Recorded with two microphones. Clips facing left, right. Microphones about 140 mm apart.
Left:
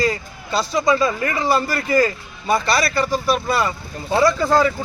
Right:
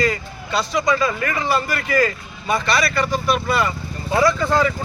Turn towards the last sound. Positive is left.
turn(degrees=35)  # may be behind; listen again after turning